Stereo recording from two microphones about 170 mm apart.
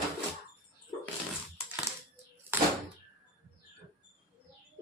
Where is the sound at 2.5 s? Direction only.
10° right (ahead or behind).